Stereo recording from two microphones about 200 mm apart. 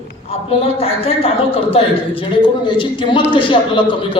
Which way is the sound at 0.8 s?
30° left (ahead or behind).